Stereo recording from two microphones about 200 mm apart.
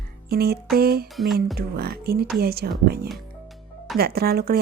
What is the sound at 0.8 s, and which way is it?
Speech, 50° right (ahead or behind).